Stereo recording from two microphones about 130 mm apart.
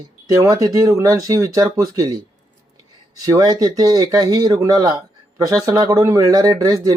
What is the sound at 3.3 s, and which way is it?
Speech, 30° right (ahead or behind).